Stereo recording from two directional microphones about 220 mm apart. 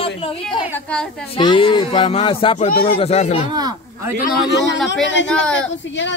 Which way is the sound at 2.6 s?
40° left (ahead or behind).